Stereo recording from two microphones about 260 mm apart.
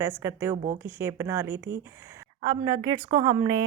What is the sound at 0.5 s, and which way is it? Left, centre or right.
Speech, right.